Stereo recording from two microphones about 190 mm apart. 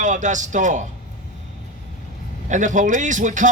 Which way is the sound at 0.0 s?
40° right (ahead or behind).